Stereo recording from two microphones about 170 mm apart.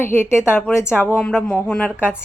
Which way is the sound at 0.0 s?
15° left (ahead or behind).